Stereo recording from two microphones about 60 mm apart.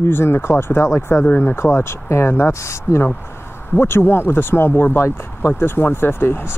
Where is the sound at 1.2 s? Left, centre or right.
Left.